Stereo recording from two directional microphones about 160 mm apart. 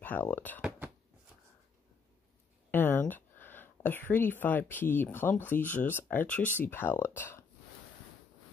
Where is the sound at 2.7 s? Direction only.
15° left (ahead or behind).